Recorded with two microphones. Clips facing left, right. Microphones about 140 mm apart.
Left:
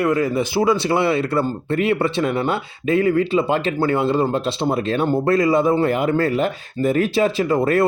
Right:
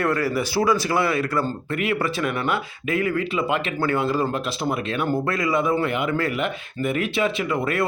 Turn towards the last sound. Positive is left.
turn(degrees=35)  # may be behind; listen again after turning